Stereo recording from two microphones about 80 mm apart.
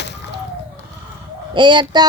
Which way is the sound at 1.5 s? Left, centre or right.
Right.